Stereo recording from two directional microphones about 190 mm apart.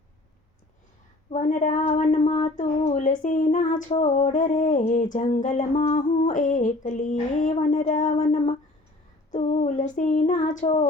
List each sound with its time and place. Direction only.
1.3 s speech: 40° left (ahead or behind)
9.3 s child singing: 40° left (ahead or behind)